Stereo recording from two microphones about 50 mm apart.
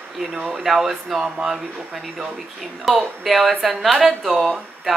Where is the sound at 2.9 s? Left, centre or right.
Centre.